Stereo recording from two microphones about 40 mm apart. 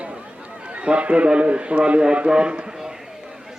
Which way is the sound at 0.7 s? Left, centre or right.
Right.